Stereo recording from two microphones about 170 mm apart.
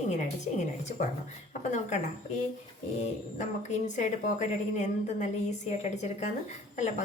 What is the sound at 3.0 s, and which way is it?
A woman's voice, 45° left (ahead or behind).